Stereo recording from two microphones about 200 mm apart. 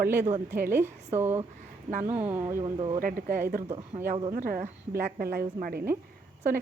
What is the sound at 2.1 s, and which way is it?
Speech, 10° right (ahead or behind).